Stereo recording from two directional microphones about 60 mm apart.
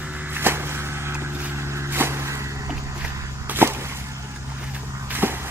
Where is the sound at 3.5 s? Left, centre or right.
Right.